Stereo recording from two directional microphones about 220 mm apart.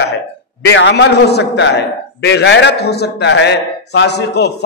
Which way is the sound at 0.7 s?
50° left (ahead or behind).